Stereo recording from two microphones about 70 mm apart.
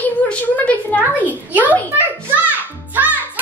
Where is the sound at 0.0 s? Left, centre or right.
Left.